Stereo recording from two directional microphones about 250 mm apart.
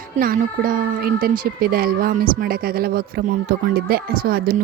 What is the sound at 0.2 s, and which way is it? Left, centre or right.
Speech, right.